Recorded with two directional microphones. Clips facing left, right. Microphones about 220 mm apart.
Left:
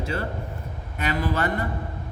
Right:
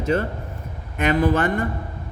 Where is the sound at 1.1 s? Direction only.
50° right (ahead or behind).